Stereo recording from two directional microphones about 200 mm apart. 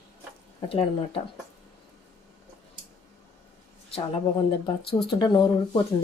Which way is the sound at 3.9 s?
30° left (ahead or behind).